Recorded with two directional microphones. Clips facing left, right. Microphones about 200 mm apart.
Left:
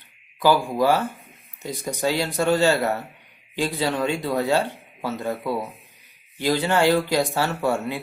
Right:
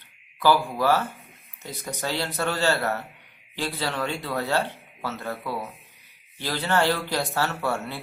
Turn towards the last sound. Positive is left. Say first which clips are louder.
# left 5 dB
turn(degrees=15)  # may be behind; listen again after turning